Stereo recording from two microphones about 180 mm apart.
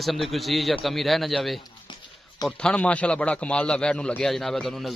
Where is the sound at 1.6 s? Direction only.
20° left (ahead or behind).